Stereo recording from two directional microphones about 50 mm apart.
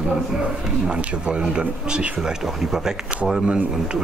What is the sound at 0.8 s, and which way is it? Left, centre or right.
Speech, right.